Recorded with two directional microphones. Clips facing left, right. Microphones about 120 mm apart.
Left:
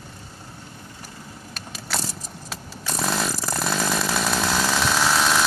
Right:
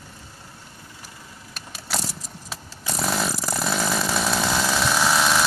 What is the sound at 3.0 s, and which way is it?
Chainsaw, 5° right (ahead or behind).